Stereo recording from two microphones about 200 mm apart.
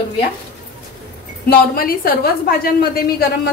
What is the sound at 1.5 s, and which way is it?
A woman's voice, 45° left (ahead or behind).